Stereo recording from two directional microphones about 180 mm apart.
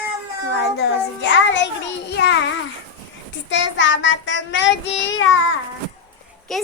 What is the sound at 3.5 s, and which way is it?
Child singing, 90° left.